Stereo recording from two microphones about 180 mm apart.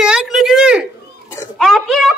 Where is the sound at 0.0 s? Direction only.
5° right (ahead or behind).